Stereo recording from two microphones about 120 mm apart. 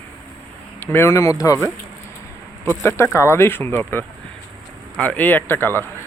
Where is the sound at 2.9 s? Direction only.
20° left (ahead or behind).